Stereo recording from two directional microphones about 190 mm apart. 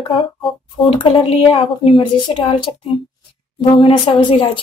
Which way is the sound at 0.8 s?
30° left (ahead or behind).